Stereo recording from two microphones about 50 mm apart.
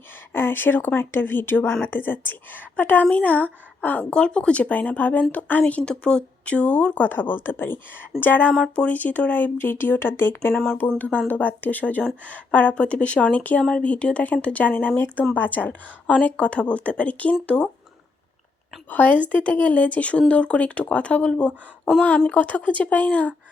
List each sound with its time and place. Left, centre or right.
0.3 s a woman's voice: left
4.1 s a woman's voice: left
5.8 s speech: centre; by 7.8 s left
8.2 s a woman's voice: left
10.7 s a woman's voice: left
18.9 s a woman's voice: left